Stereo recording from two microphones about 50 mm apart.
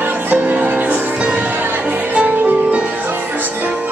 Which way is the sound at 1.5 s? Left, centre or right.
Right.